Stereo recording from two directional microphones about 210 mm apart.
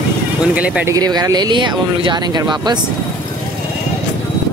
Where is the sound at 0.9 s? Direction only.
20° right (ahead or behind).